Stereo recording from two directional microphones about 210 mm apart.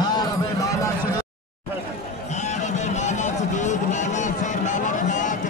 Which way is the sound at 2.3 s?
35° left (ahead or behind).